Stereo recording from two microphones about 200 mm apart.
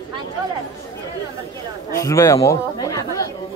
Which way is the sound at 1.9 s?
15° left (ahead or behind).